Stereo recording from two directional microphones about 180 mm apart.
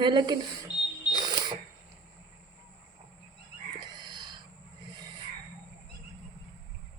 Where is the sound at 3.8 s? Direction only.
25° right (ahead or behind).